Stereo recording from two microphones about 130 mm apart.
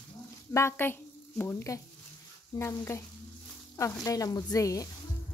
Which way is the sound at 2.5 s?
35° left (ahead or behind).